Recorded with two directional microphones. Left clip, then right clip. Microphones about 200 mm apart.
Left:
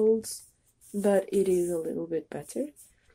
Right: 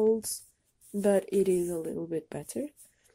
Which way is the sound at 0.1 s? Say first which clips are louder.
Left 2 dB; 30° right (ahead or behind).